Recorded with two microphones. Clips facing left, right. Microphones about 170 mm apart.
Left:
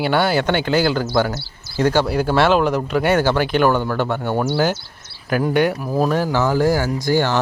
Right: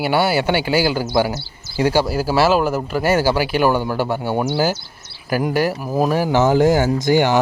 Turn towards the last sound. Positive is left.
turn(degrees=-15)  # may be behind; listen again after turning